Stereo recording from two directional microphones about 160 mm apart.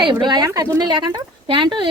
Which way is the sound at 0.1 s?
25° right (ahead or behind).